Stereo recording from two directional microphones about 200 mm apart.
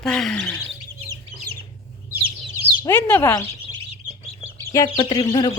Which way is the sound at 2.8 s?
10° left (ahead or behind).